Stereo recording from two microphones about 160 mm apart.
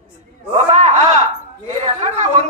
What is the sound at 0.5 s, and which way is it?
Speech, 40° right (ahead or behind).